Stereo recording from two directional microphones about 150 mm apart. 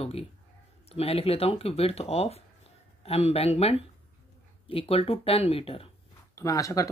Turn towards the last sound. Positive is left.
turn(degrees=20)  # may be behind; listen again after turning